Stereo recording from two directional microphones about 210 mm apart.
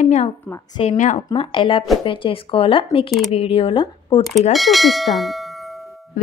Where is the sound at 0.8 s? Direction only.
35° left (ahead or behind).